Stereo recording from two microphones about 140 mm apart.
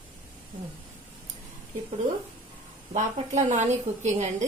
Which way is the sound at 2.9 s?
60° right (ahead or behind).